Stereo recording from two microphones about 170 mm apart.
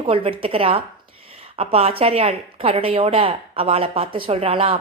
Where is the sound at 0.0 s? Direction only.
30° right (ahead or behind).